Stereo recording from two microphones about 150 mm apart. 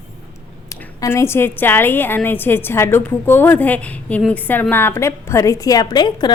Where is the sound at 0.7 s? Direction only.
20° left (ahead or behind).